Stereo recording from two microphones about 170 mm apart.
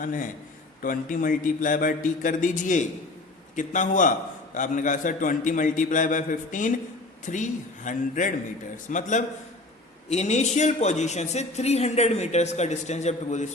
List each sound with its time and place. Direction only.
0.0 s a man's voice: 50° left (ahead or behind)